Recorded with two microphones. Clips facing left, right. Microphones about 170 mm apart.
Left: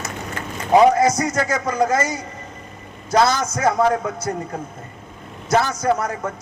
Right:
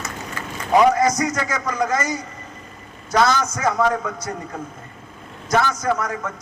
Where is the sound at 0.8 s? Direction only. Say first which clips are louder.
Left 2 dB; 30° left (ahead or behind).